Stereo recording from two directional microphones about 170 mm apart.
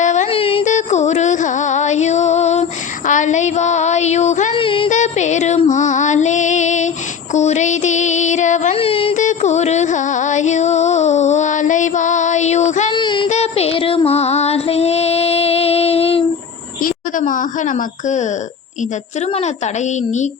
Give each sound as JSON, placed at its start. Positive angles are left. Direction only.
{"t": 0.0, "sound": "music", "side_deg": 45}
{"t": 3.1, "sound": "child singing", "side_deg": 45}
{"t": 4.5, "sound": "music", "side_deg": 30}
{"t": 4.9, "sound": "music", "side_deg": 45}
{"t": 12.9, "sound": "child singing", "side_deg": 25}
{"t": 13.2, "sound": "child singing", "side_deg": 40}
{"t": 16.8, "sound": "a woman's voice", "side_deg": 50}